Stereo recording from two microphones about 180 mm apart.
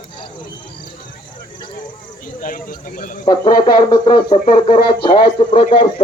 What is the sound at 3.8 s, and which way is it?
Speech, 25° left (ahead or behind).